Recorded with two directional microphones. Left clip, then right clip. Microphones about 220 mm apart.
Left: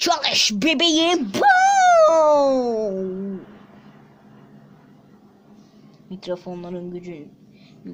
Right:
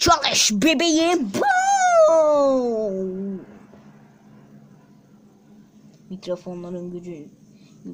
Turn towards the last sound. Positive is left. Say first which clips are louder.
# left 1 dB
turn(degrees=0)  # may be behind; listen again after turning